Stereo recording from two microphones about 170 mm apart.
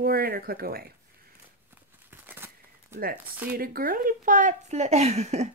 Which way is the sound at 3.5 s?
60° right (ahead or behind).